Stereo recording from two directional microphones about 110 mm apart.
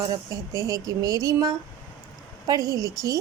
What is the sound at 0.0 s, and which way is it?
A woman's voice, 35° right (ahead or behind).